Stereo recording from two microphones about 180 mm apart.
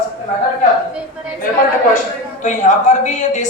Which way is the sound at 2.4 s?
40° left (ahead or behind).